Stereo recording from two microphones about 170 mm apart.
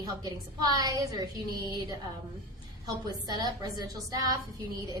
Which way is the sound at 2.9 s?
25° right (ahead or behind).